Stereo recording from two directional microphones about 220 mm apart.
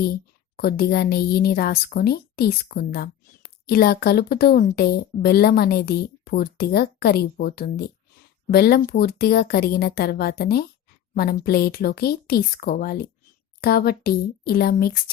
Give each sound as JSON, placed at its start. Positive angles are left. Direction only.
{"t": 0.0, "sound": "speech", "side_deg": 45}